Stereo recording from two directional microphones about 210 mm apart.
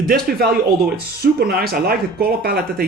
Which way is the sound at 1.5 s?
45° right (ahead or behind).